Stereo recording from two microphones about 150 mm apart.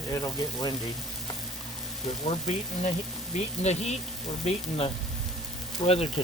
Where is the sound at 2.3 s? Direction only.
45° left (ahead or behind).